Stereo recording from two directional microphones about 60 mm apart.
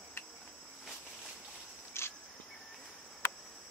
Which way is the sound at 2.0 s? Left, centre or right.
Left.